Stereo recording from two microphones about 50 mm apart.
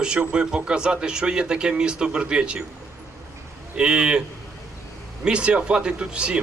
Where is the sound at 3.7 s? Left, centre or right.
Right.